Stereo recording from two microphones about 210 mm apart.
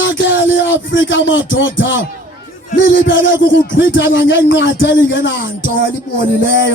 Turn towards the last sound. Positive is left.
turn(degrees=65)  # may be behind; listen again after turning